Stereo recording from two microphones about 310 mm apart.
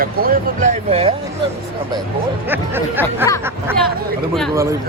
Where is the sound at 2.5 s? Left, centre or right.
Centre.